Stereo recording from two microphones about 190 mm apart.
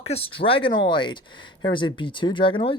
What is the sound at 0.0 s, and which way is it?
Speech, 30° left (ahead or behind).